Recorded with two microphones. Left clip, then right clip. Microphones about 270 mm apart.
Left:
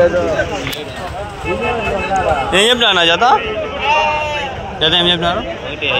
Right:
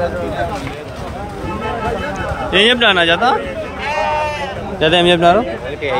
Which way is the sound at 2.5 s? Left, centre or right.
Centre.